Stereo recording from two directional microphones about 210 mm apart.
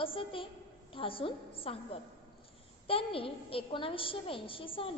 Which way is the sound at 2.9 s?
25° left (ahead or behind).